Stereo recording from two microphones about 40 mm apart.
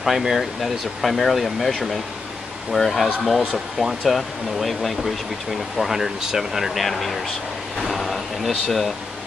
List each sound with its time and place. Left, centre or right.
0.0 s speech: centre
2.7 s speech: centre
5.8 s speech: centre
7.8 s a sound: centre